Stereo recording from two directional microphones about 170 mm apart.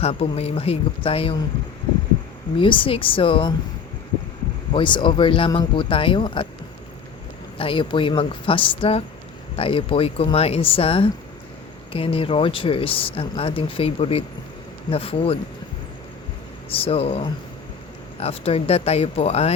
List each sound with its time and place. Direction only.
0.0 s speech: 35° left (ahead or behind)
2.6 s speech: 30° left (ahead or behind)
4.7 s speech: 30° left (ahead or behind)
7.6 s speech: 30° left (ahead or behind)
16.7 s speech: 35° left (ahead or behind)